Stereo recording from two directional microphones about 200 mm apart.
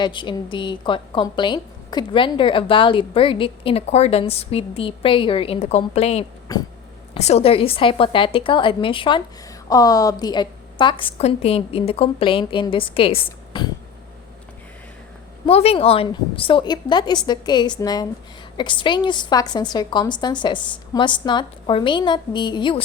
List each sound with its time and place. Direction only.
0.0 s a woman's voice: 25° left (ahead or behind)
15.4 s a woman's voice: 30° left (ahead or behind)